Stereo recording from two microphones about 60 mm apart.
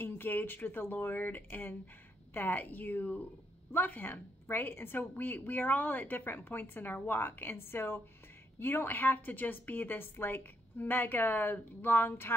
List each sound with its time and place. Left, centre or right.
0.0 s a woman's voice: left